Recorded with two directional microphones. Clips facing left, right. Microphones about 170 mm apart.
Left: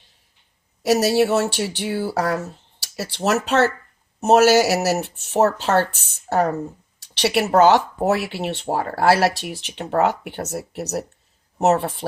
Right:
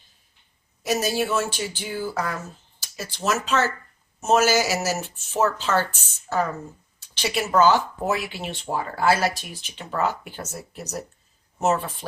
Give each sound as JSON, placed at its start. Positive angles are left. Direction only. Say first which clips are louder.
{"t": 0.8, "sound": "speech", "louder": "left 7 dB", "side_deg": 70}
{"t": 7.0, "sound": "a woman's voice", "louder": "left 6 dB", "side_deg": 70}